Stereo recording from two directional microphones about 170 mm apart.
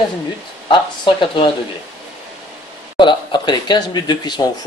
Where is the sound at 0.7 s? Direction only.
25° left (ahead or behind).